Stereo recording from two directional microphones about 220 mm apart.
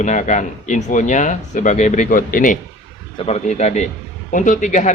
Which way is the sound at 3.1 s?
25° left (ahead or behind).